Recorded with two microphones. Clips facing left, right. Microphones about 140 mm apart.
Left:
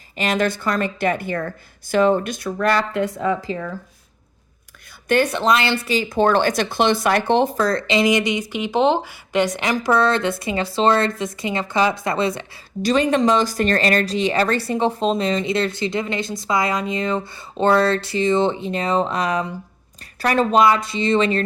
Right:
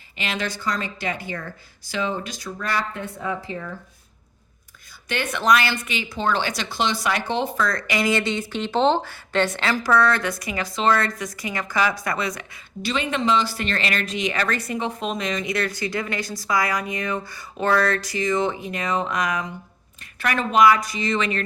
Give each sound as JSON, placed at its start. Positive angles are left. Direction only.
{"t": 0.2, "sound": "a woman's voice", "side_deg": 45}
{"t": 5.0, "sound": "speech", "side_deg": 40}
{"t": 5.4, "sound": "speech", "side_deg": 25}
{"t": 6.1, "sound": "speech", "side_deg": 50}
{"t": 7.6, "sound": "speech", "side_deg": 30}
{"t": 12.8, "sound": "speech", "side_deg": 40}